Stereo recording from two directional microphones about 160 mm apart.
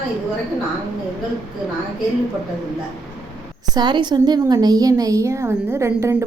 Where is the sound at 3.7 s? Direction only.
30° right (ahead or behind).